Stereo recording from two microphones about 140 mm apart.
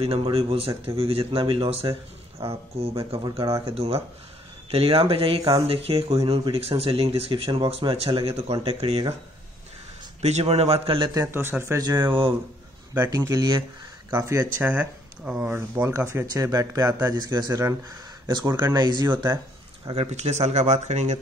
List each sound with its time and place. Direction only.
0.0 s speech: 45° right (ahead or behind)
10.2 s speech: 50° right (ahead or behind)
11.1 s speech: 15° right (ahead or behind); by 12.4 s 35° right (ahead or behind)
13.1 s speech: 25° right (ahead or behind)
19.9 s speech: 50° right (ahead or behind)